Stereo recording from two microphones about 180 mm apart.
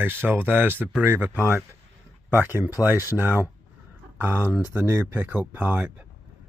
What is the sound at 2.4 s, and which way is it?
Speech, 10° right (ahead or behind).